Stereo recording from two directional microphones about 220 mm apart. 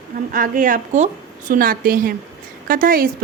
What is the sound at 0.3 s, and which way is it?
A woman's voice, 35° right (ahead or behind).